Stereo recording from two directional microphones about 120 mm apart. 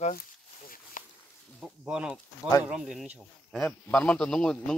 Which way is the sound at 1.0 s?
90° left.